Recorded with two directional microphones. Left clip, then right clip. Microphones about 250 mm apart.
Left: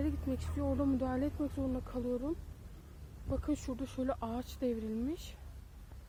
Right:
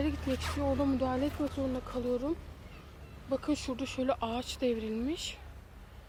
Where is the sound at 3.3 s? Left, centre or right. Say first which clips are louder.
Right 5 dB; centre.